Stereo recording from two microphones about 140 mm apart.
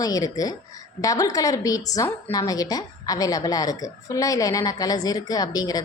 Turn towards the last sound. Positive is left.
turn(degrees=25)  # may be behind; listen again after turning